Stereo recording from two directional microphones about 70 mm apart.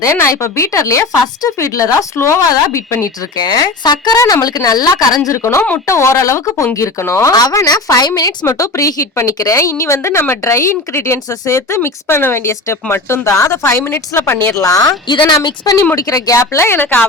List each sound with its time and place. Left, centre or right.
0.0 s a woman's voice: left
2.1 s a woman's voice: left
3.3 s speech: left
4.2 s a woman's voice: left
7.3 s a woman's voice: left
8.4 s a woman's voice: left
14.5 s a woman's voice: left
16.7 s speech: left